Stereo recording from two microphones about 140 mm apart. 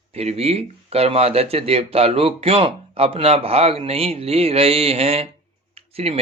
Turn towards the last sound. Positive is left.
turn(degrees=-45)  # may be behind; listen again after turning